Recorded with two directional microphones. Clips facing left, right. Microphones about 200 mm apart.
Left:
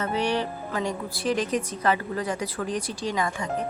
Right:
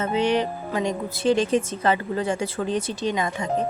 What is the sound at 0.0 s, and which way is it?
A woman's voice, 20° right (ahead or behind).